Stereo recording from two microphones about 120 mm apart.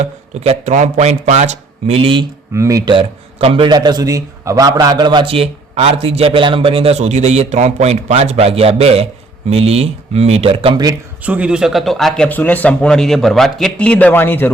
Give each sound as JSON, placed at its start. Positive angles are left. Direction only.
{"t": 0.0, "sound": "speech", "side_deg": -65}
{"t": 2.0, "sound": "speech", "side_deg": -45}
{"t": 2.5, "sound": "speech", "side_deg": -25}
{"t": 2.9, "sound": "a man's voice", "side_deg": -50}
{"t": 11.2, "sound": "a man's voice", "side_deg": -10}